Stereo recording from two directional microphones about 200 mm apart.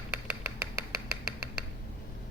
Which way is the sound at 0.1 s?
10° right (ahead or behind).